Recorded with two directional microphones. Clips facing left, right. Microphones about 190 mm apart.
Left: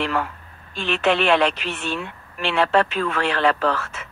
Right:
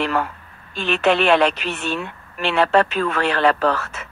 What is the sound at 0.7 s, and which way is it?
Speech, 40° right (ahead or behind).